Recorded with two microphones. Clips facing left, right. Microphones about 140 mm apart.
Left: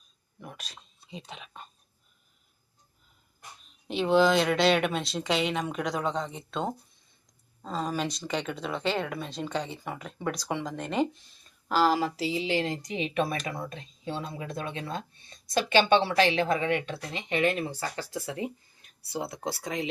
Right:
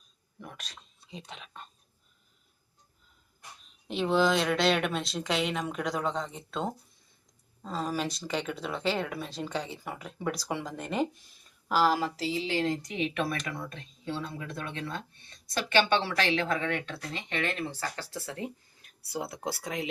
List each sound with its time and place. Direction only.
0.3 s speech: 5° left (ahead or behind)
3.8 s speech: centre (ahead or behind)